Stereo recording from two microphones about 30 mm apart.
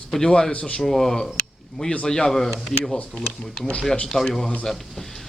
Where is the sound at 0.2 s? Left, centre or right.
Centre.